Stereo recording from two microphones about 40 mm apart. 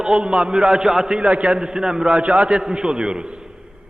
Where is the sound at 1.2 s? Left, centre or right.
Right.